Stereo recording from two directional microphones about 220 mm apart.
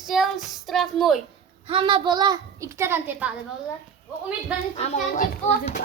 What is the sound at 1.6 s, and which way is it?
A child's voice, 25° right (ahead or behind).